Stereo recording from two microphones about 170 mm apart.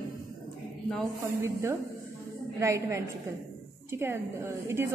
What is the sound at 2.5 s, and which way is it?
A woman's voice, 15° right (ahead or behind).